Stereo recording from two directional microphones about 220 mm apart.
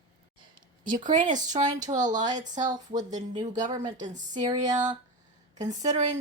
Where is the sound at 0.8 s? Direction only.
35° right (ahead or behind).